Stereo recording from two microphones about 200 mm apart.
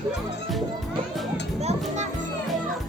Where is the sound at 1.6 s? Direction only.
30° right (ahead or behind).